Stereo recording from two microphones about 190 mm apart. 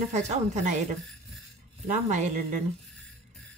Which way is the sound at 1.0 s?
Centre (ahead or behind).